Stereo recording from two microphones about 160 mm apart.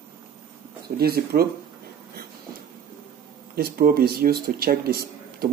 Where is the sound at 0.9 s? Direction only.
75° right (ahead or behind).